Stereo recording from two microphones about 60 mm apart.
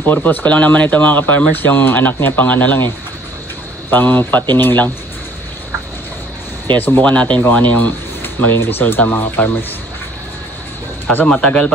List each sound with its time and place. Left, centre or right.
0.0 s speech: left
3.9 s speech: left
6.8 s speech: left
11.2 s speech: left